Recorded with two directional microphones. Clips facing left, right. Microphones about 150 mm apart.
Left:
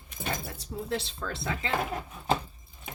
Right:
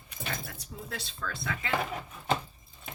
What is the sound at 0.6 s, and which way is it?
Speech, 25° left (ahead or behind).